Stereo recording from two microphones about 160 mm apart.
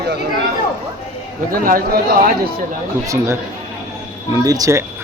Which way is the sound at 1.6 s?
65° right (ahead or behind).